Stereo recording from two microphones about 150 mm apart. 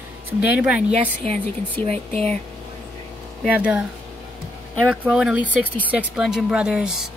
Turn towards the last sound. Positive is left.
turn(degrees=-5)  # may be behind; listen again after turning